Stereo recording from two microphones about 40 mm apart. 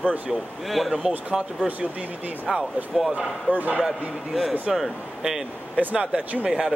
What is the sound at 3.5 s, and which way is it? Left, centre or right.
Speech, right.